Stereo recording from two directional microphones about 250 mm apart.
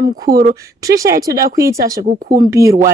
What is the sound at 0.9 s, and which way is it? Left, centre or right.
Speech, centre.